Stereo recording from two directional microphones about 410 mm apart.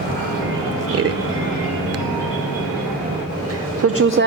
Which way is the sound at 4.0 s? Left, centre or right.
Right.